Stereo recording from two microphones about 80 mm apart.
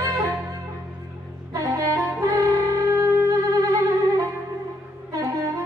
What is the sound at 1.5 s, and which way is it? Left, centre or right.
Wind instrument, right.